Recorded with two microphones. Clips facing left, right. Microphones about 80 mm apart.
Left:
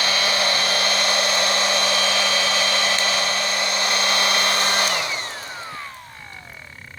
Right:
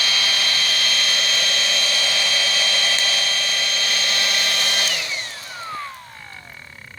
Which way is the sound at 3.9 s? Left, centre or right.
Left.